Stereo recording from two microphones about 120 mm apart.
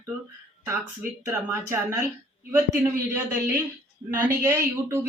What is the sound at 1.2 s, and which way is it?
Speech, 20° right (ahead or behind).